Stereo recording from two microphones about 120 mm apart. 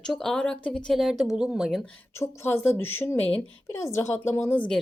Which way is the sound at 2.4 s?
20° left (ahead or behind).